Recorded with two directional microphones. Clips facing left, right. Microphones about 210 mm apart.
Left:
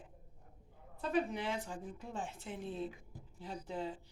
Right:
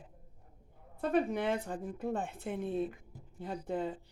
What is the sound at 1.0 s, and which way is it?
Speech, 55° right (ahead or behind).